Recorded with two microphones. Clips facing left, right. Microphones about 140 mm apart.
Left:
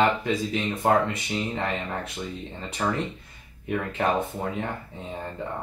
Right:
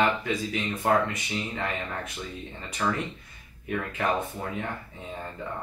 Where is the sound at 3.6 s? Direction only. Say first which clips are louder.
Left 3 dB; 25° left (ahead or behind).